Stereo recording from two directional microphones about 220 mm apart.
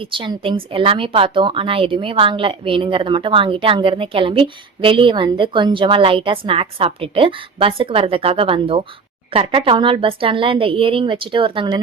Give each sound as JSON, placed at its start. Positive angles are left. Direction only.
{"t": 0.0, "sound": "a woman's voice", "side_deg": -25}